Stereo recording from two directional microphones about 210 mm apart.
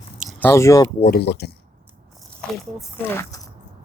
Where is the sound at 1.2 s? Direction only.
50° left (ahead or behind).